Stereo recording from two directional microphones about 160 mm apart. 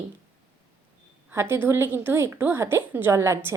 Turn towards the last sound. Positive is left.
turn(degrees=-15)  # may be behind; listen again after turning